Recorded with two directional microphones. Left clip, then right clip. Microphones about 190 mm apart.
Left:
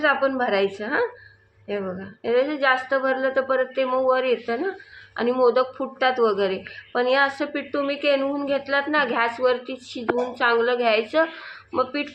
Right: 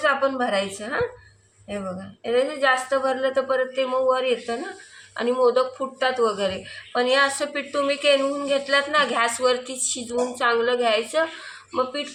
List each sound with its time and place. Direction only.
0.0 s a woman's voice: 30° left (ahead or behind)